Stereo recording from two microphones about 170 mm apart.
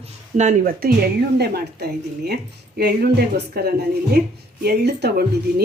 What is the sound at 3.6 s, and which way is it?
Speech, 65° right (ahead or behind).